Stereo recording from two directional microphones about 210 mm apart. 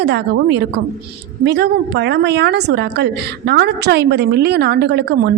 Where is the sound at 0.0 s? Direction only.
55° right (ahead or behind).